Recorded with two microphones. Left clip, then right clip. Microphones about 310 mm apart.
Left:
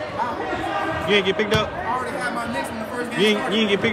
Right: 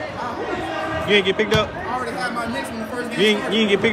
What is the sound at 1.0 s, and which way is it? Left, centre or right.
Speech, centre.